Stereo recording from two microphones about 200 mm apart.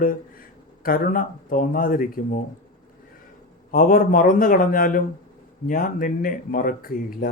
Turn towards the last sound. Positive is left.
turn(degrees=45)  # may be behind; listen again after turning